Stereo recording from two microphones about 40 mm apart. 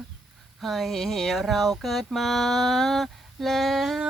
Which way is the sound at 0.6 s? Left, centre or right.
Centre.